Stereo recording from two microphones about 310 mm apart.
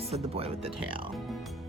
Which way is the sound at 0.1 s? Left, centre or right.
Centre.